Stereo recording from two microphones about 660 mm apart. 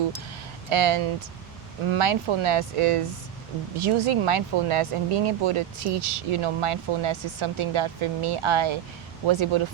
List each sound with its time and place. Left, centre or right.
0.7 s speech: right